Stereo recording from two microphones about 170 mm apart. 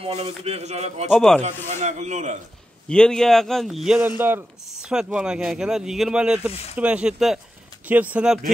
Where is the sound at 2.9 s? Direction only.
5° left (ahead or behind).